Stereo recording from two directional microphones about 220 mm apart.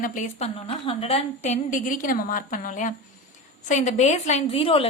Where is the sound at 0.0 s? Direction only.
35° left (ahead or behind).